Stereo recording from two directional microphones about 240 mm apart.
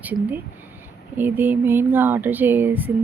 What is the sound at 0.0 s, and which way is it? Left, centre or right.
A woman's voice, centre.